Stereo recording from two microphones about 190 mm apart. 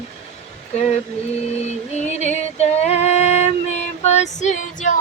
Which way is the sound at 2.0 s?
35° left (ahead or behind).